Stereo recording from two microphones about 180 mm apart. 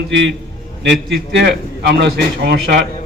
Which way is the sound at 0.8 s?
70° right (ahead or behind).